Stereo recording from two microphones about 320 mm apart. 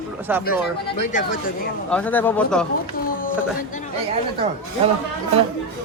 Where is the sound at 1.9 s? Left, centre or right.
Centre.